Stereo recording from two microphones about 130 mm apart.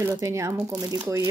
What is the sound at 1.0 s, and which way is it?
Speech, 20° right (ahead or behind).